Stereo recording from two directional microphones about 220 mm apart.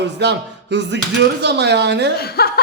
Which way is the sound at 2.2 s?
45° left (ahead or behind).